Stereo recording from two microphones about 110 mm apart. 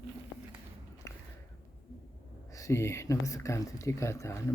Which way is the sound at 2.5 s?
30° left (ahead or behind).